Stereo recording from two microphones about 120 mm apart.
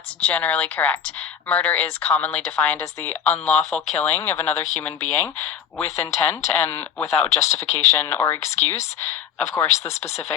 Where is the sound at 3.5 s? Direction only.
65° left (ahead or behind).